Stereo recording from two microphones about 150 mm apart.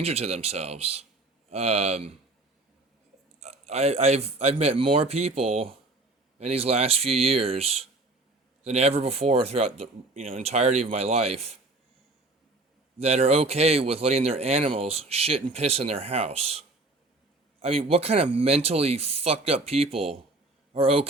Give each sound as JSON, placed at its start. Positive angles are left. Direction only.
{"t": 0.0, "sound": "speech", "side_deg": -45}
{"t": 3.4, "sound": "speech", "side_deg": -45}
{"t": 13.0, "sound": "speech", "side_deg": -45}